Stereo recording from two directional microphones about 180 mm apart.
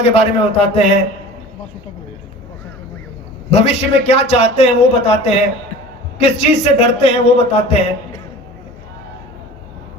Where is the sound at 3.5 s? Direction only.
35° left (ahead or behind).